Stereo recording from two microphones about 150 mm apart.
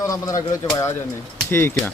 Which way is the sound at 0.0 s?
20° left (ahead or behind).